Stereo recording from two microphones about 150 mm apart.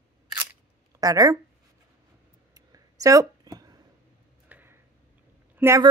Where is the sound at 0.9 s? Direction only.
25° right (ahead or behind).